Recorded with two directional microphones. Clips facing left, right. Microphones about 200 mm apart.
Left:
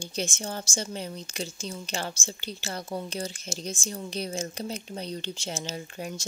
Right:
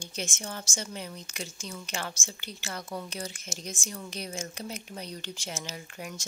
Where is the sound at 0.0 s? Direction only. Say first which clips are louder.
Left 5 dB; 30° left (ahead or behind).